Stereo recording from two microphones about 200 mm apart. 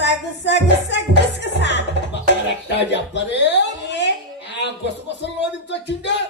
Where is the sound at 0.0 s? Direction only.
60° left (ahead or behind).